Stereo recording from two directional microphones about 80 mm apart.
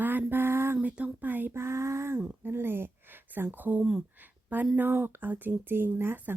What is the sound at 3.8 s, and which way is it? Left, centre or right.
Speech, centre.